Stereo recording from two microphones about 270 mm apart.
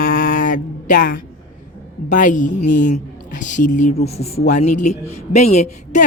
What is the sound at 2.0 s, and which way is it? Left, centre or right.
Speech, left.